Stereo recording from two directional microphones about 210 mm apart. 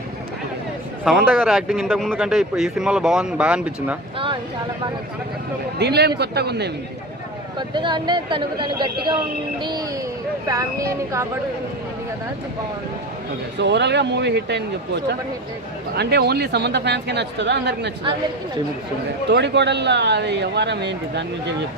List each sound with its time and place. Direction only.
1.0 s speech: 5° right (ahead or behind)
5.8 s speech: 50° right (ahead or behind)
7.7 s speech: 20° right (ahead or behind)
13.6 s speech: 55° right (ahead or behind)
19.3 s speech: 55° right (ahead or behind)